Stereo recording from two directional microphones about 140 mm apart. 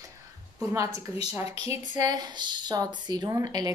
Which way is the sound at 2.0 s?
30° right (ahead or behind).